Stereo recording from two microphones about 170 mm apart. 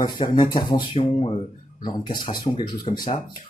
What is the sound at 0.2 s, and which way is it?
Speech, 35° left (ahead or behind).